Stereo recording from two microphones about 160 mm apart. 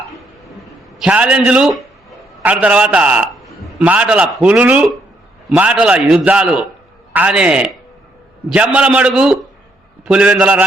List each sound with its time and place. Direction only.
0.9 s a man's voice: 10° right (ahead or behind)